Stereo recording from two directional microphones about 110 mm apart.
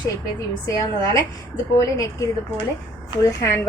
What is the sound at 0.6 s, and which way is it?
A woman's voice, 30° left (ahead or behind).